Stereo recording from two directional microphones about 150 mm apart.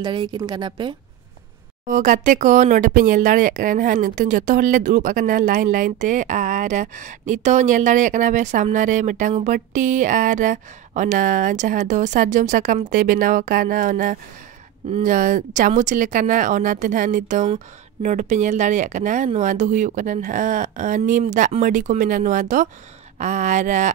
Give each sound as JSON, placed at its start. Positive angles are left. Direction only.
{"t": 0.0, "sound": "a woman's voice", "side_deg": -30}
{"t": 1.9, "sound": "speech", "side_deg": -55}